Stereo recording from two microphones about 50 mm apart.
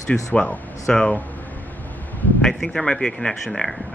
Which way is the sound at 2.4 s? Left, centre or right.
Centre.